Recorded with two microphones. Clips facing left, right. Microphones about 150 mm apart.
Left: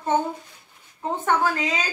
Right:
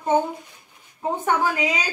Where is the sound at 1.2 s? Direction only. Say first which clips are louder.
Even; 15° right (ahead or behind).